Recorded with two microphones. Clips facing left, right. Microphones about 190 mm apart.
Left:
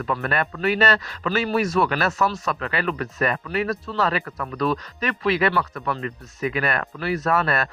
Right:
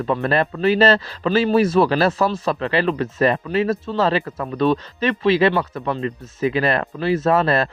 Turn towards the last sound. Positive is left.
turn(degrees=-25)  # may be behind; listen again after turning